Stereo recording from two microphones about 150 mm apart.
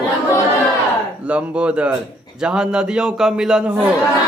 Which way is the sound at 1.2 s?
10° right (ahead or behind).